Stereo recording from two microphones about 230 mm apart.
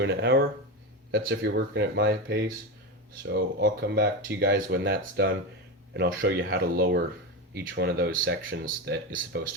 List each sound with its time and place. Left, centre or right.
0.0 s speech: right
8.2 s speech: right
8.6 s speech: right